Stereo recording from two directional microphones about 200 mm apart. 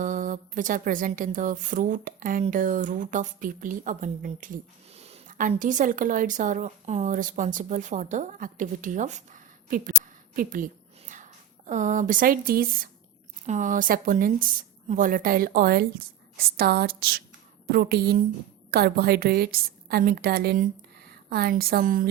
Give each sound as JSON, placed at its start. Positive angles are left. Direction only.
{"t": 0.0, "sound": "a woman's voice", "side_deg": -40}